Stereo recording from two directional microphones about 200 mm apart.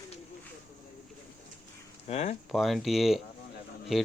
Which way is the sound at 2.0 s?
35° left (ahead or behind).